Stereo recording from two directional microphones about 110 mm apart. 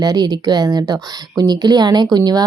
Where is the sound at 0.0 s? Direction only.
35° right (ahead or behind).